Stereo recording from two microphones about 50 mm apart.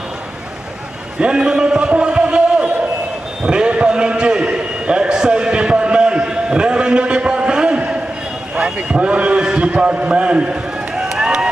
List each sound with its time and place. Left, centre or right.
1.2 s a man's voice: centre
3.4 s a sound: centre
9.0 s a man's voice: right
9.4 s run: centre